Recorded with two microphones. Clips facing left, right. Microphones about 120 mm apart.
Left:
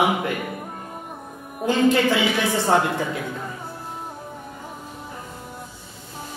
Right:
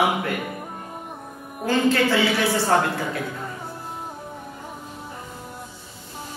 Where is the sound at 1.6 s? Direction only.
15° left (ahead or behind).